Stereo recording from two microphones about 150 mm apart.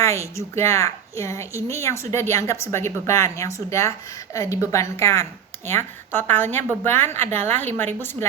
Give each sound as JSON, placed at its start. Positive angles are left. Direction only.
{"t": 0.0, "sound": "a woman's voice", "side_deg": 20}